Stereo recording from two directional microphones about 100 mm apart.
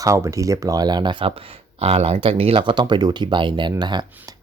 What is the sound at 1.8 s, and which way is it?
Speech, 85° right.